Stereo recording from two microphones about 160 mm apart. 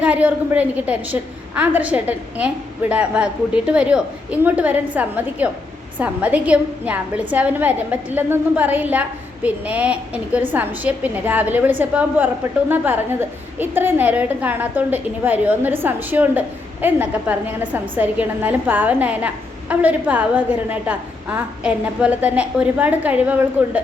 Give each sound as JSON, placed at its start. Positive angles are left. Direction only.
{"t": 0.0, "sound": "a woman's voice", "side_deg": -10}